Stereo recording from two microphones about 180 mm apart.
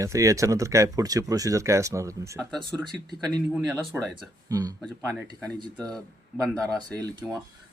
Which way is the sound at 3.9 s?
10° right (ahead or behind).